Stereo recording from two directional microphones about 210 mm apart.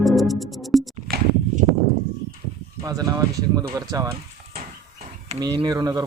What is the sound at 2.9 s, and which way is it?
Speech, 15° right (ahead or behind).